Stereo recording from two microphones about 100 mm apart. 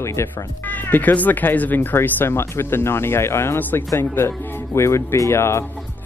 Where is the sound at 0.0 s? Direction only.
30° left (ahead or behind).